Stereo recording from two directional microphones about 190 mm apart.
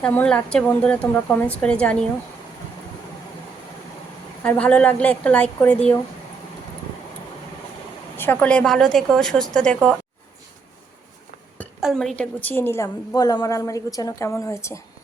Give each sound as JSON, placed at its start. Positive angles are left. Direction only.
{"t": 0.0, "sound": "a woman's voice", "side_deg": 5}
{"t": 4.4, "sound": "a woman's voice", "side_deg": 5}
{"t": 8.1, "sound": "a woman's voice", "side_deg": 10}
{"t": 11.8, "sound": "a woman's voice", "side_deg": 0}